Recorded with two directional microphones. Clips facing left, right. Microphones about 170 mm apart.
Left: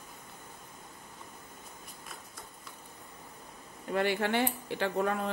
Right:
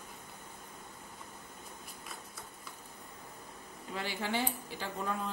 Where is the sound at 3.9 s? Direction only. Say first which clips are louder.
Left 7 dB; 60° left (ahead or behind).